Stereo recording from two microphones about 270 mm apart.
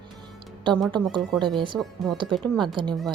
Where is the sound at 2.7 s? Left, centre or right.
Centre.